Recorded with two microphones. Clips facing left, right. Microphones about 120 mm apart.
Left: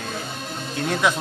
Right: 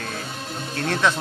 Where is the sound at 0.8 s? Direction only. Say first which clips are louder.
Even; 10° left (ahead or behind).